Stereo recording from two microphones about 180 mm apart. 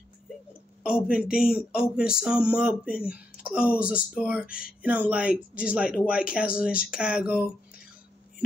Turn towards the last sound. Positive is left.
turn(degrees=-5)  # may be behind; listen again after turning